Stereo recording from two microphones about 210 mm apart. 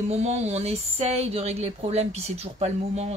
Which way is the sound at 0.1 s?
30° right (ahead or behind).